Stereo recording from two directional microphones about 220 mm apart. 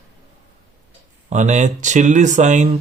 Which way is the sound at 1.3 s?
35° right (ahead or behind).